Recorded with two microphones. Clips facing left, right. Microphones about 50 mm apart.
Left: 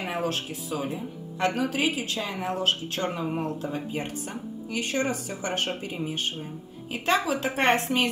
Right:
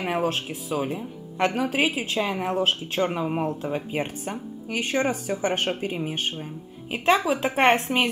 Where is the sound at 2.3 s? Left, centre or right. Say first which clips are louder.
Right 3 dB; centre.